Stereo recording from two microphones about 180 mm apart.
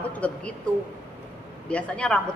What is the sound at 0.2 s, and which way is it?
Speech, 5° left (ahead or behind).